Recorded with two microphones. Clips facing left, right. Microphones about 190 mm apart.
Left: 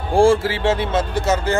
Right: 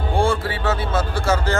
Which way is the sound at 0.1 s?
30° left (ahead or behind).